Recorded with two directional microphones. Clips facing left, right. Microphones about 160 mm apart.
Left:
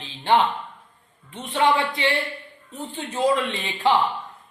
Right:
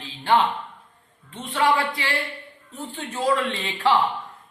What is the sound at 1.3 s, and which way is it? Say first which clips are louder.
A man's voice: left 1 dB; 15° left (ahead or behind).